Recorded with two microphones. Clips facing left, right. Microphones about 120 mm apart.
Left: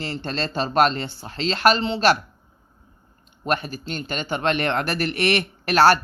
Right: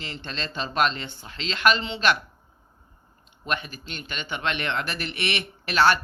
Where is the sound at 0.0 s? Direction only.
40° left (ahead or behind).